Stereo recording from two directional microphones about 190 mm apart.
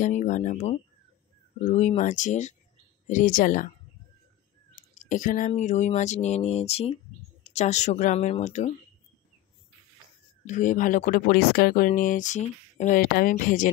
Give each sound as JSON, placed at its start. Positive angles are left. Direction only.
{"t": 0.0, "sound": "speech", "side_deg": 40}
{"t": 4.7, "sound": "a sound", "side_deg": 40}
{"t": 5.5, "sound": "speech", "side_deg": 40}
{"t": 10.4, "sound": "speech", "side_deg": 40}